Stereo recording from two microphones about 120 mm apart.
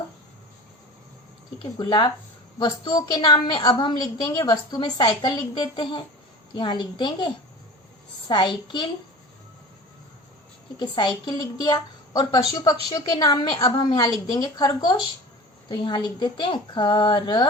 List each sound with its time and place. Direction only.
1.8 s a woman's voice: 40° left (ahead or behind)
10.8 s a woman's voice: 35° left (ahead or behind)